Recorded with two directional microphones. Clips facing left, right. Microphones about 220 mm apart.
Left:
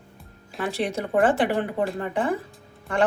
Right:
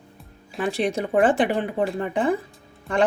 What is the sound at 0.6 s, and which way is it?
Speech, 15° right (ahead or behind).